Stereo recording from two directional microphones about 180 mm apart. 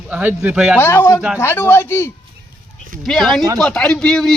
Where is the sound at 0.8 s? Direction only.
15° left (ahead or behind).